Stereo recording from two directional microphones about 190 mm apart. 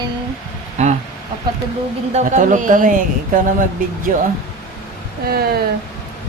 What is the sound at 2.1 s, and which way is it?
Speech, 40° right (ahead or behind).